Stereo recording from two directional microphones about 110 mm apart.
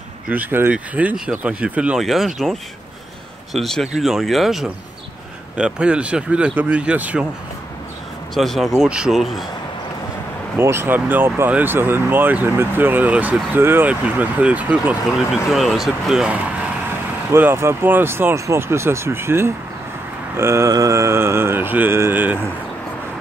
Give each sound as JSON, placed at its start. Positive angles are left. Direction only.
{"t": 0.3, "sound": "speech", "side_deg": -15}
{"t": 3.5, "sound": "speech", "side_deg": 0}
{"t": 8.4, "sound": "speech", "side_deg": 0}
{"t": 10.6, "sound": "speech", "side_deg": -20}
{"t": 15.1, "sound": "speech", "side_deg": 0}
{"t": 17.3, "sound": "speech", "side_deg": -20}